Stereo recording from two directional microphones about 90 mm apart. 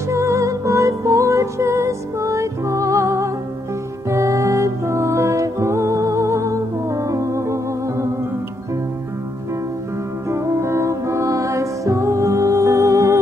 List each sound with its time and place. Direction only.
0.1 s music: 35° right (ahead or behind)
10.3 s music: 35° right (ahead or behind)